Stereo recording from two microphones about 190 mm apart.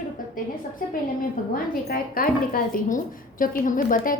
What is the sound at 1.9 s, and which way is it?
A woman's voice, 50° left (ahead or behind).